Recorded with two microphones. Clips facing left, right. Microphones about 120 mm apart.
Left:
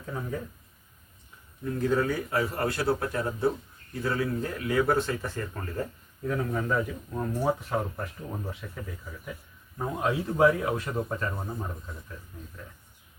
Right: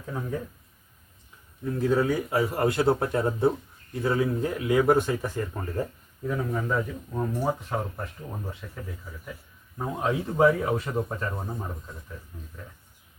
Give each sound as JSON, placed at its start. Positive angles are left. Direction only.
{"t": 0.1, "sound": "speech", "side_deg": -5}
{"t": 1.6, "sound": "a man's voice", "side_deg": -5}
{"t": 6.2, "sound": "speech", "side_deg": -5}